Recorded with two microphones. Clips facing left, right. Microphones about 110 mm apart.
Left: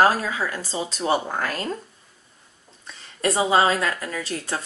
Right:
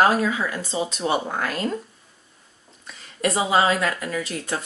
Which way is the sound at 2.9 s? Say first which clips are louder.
Even; 30° left (ahead or behind).